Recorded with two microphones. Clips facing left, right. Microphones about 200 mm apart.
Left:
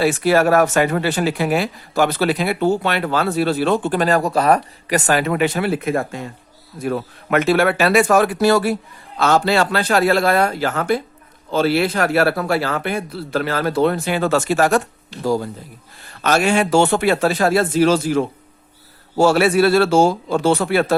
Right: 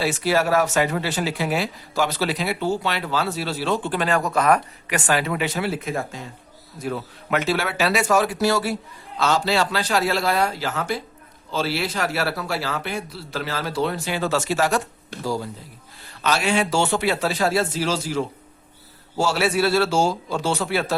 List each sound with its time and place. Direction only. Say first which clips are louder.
0.0 s speech: left 6 dB; 55° left (ahead or behind)